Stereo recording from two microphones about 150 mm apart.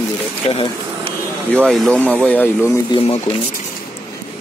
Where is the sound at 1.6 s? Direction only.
5° left (ahead or behind).